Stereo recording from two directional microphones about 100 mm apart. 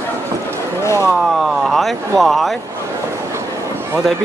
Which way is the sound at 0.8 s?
25° left (ahead or behind).